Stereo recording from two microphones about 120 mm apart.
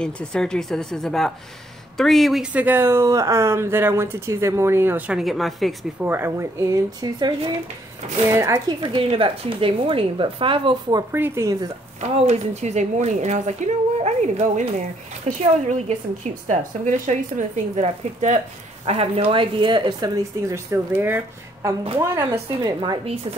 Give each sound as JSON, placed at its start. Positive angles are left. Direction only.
{"t": 0.0, "sound": "speech", "side_deg": 5}
{"t": 5.2, "sound": "speech", "side_deg": 0}
{"t": 5.9, "sound": "speech", "side_deg": -20}
{"t": 8.3, "sound": "speech", "side_deg": -25}
{"t": 8.6, "sound": "a woman's voice", "side_deg": -40}
{"t": 11.1, "sound": "speech", "side_deg": -20}
{"t": 12.0, "sound": "speech", "side_deg": -65}
{"t": 16.4, "sound": "speech", "side_deg": -90}
{"t": 18.9, "sound": "speech", "side_deg": -55}
{"t": 22.5, "sound": "speech", "side_deg": -40}